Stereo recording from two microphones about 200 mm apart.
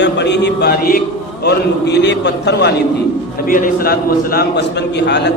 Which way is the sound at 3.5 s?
45° left (ahead or behind).